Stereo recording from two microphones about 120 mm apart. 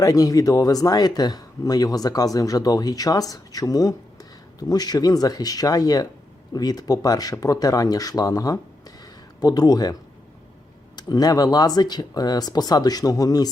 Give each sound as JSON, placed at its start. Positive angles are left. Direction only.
{"t": 0.0, "sound": "speech", "side_deg": 30}